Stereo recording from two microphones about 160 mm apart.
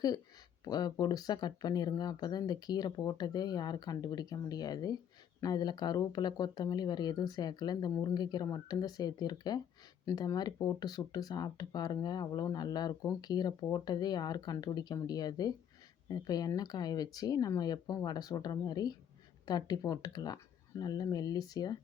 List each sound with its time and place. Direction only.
0.6 s speech: 25° left (ahead or behind)